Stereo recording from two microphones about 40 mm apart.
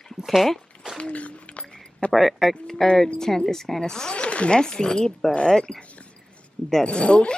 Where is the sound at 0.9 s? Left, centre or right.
Left.